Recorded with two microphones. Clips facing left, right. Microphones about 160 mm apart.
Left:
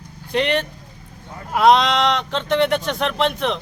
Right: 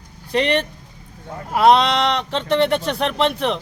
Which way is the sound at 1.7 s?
35° right (ahead or behind).